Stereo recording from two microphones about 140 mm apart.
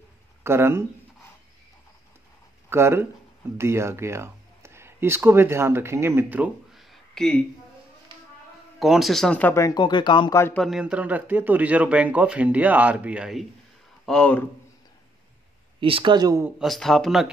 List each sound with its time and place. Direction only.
0.4 s speech: 15° right (ahead or behind)
2.7 s speech: 20° right (ahead or behind)
6.7 s a sound: centre (ahead or behind)
8.7 s speech: centre (ahead or behind); by 10.3 s 35° left (ahead or behind)
10.3 s speech: 15° left (ahead or behind)
10.6 s speech: 5° right (ahead or behind)
14.0 s speech: 5° left (ahead or behind)
15.8 s speech: 35° right (ahead or behind)
16.5 s speech: centre (ahead or behind)